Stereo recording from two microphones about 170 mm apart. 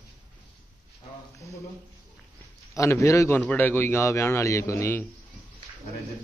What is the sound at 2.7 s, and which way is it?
A man's voice, 20° left (ahead or behind).